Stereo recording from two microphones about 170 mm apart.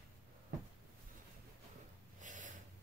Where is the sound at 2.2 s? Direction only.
50° right (ahead or behind).